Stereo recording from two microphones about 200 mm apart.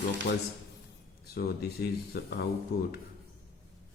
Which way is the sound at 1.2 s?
50° left (ahead or behind).